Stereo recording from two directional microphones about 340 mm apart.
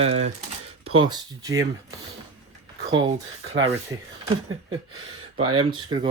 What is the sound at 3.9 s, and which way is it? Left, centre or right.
Speech, centre.